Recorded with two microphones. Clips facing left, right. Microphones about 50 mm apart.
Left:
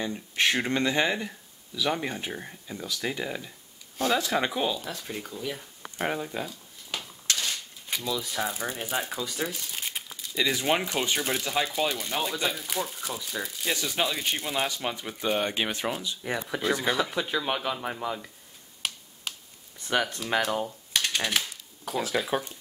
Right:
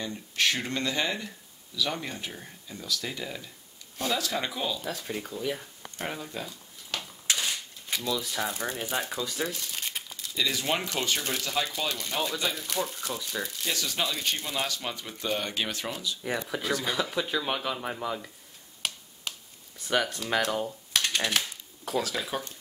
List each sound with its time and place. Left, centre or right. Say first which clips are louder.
0.0 s speech: left 2 dB; left
4.8 s speech: right 2 dB; centre
5.8 s speech: left 5 dB; centre
6.9 s a sound: even; centre
7.2 s a sound: even; centre
7.9 s speech: even; centre
13.7 s speech: left 4 dB; centre
16.2 s speech: left 1 dB; centre
18.8 s finger snapping: even; centre
20.2 s typewriter: left 1 dB; centre